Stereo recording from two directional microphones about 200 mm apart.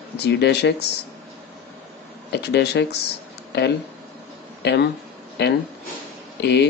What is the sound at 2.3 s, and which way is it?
Speech, 55° left (ahead or behind).